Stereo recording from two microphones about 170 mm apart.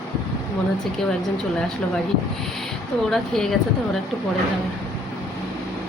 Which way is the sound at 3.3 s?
Centre (ahead or behind).